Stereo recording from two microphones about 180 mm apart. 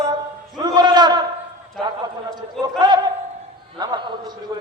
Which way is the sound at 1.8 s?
20° right (ahead or behind).